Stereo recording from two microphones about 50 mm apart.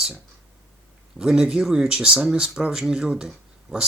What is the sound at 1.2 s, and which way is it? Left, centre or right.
Speech, centre.